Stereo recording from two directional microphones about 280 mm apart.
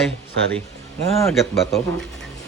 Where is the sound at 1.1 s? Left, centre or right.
Centre.